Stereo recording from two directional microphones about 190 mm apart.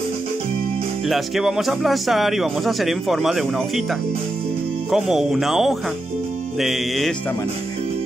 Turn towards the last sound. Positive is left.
turn(degrees=0)  # may be behind; listen again after turning